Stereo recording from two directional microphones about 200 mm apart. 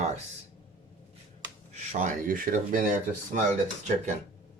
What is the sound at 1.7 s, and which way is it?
Speech, 35° right (ahead or behind).